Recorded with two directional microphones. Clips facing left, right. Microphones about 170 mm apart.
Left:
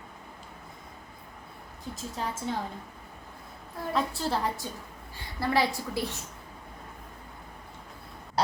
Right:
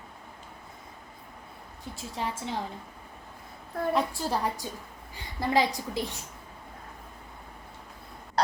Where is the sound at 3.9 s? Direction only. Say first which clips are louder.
Even; 15° right (ahead or behind).